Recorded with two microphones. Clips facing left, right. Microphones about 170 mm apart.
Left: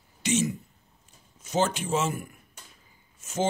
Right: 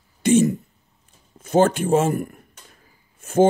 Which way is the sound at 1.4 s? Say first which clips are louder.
Right 9 dB; 55° right (ahead or behind).